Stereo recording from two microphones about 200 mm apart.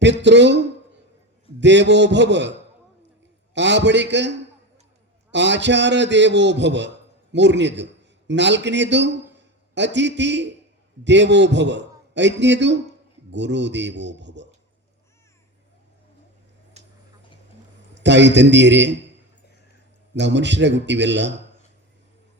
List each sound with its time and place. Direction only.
0.0 s a man's voice: 60° right (ahead or behind)
17.9 s a man's voice: 60° right (ahead or behind)
20.1 s a man's voice: 60° right (ahead or behind)